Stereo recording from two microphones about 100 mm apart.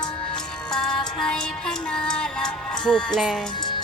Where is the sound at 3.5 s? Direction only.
50° left (ahead or behind).